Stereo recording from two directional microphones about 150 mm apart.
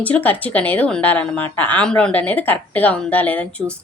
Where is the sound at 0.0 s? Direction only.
10° left (ahead or behind).